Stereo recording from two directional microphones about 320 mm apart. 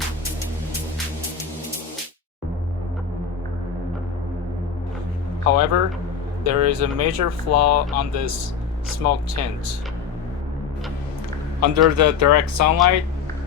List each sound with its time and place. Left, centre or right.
5.4 s a man's voice: right
11.6 s speech: right